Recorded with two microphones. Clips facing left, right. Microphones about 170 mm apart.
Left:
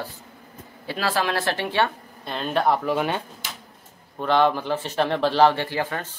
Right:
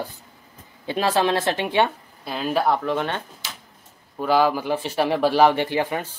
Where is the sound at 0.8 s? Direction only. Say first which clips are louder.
Right 4 dB; 20° right (ahead or behind).